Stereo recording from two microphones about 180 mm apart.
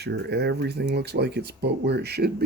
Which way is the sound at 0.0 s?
65° right (ahead or behind).